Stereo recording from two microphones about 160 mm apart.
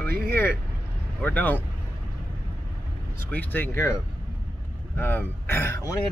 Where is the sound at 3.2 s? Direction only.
10° left (ahead or behind).